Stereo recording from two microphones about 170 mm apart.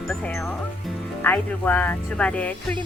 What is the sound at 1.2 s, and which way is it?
Speech, 10° left (ahead or behind).